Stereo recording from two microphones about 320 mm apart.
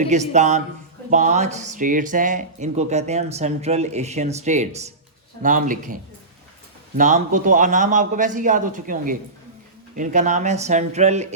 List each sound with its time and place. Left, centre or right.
0.0 s speech: right